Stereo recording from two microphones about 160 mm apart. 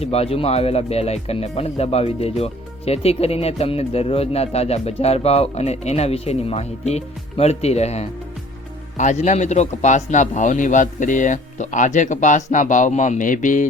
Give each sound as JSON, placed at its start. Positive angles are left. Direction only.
{"t": 0.0, "sound": "a man's voice", "side_deg": 40}